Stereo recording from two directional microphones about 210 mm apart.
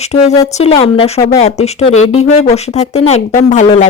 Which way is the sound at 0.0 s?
30° left (ahead or behind).